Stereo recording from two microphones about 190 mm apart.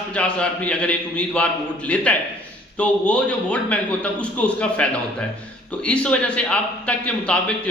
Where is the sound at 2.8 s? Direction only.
5° left (ahead or behind).